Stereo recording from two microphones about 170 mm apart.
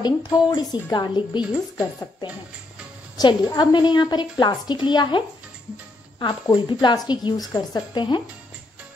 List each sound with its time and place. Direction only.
0.0 s a woman's voice: 25° left (ahead or behind)
3.2 s a woman's voice: 25° left (ahead or behind)
6.5 s a woman's voice: 25° left (ahead or behind)